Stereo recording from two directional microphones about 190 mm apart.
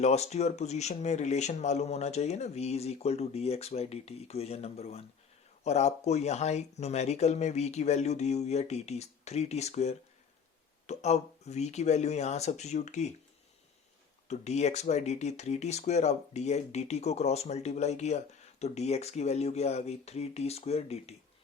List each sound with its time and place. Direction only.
0.0 s speech: 35° left (ahead or behind)
14.3 s speech: 35° left (ahead or behind)